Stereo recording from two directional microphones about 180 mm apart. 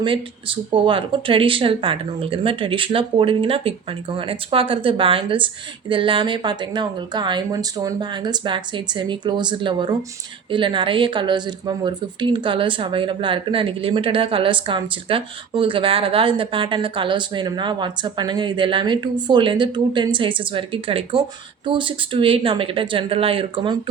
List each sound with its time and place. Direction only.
0.0 s a woman's voice: 30° right (ahead or behind)